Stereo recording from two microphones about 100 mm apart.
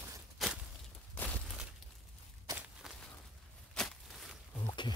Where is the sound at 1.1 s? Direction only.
15° left (ahead or behind).